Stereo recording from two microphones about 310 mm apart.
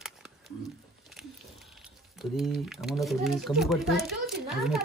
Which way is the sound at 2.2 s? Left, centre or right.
Centre.